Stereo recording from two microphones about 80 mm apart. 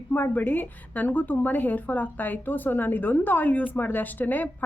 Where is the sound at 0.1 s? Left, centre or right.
Left.